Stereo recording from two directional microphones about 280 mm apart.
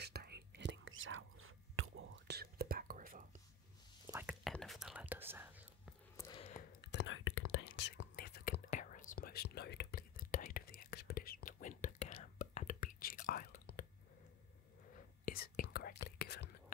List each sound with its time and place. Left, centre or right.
0.0 s whispering: right
4.1 s whispering: centre
6.1 s a sound: centre
6.8 s whispering: left
15.0 s whispering: left